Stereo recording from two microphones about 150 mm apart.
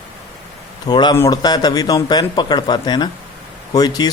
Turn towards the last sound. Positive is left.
turn(degrees=25)  # may be behind; listen again after turning